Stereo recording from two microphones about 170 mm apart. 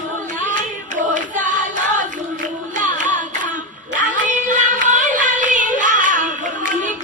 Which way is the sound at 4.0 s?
50° right (ahead or behind).